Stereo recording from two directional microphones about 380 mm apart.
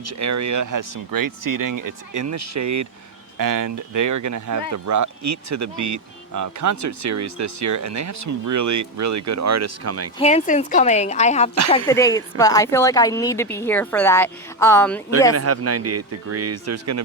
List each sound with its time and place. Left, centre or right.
0.0 s speech: right
10.2 s speech: centre
15.3 s speech: right